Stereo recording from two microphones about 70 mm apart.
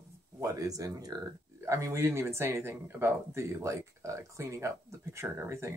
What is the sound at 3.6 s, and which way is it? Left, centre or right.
Speech, right.